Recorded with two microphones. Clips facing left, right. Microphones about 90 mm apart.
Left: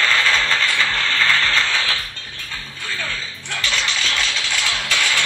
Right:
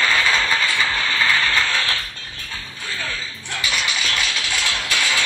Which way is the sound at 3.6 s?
10° right (ahead or behind).